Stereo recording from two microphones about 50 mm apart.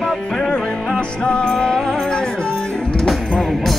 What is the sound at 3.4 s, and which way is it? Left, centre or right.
Music, centre.